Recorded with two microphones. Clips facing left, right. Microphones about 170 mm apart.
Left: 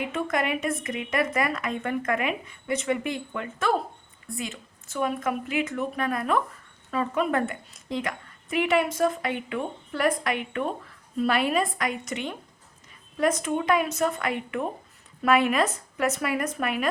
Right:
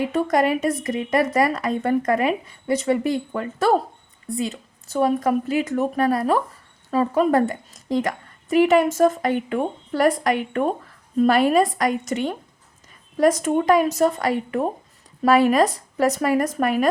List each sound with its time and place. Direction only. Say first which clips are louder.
0.0 s a woman's voice: right 7 dB; 35° right (ahead or behind)